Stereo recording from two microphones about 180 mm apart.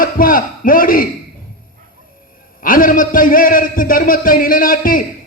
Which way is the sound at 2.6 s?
50° left (ahead or behind).